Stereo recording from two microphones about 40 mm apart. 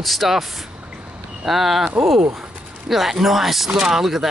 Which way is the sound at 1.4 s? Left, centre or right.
Centre.